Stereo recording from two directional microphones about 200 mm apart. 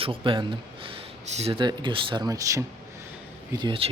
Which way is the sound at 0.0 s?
25° right (ahead or behind).